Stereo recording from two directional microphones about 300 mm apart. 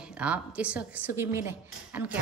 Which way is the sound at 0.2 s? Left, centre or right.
Centre.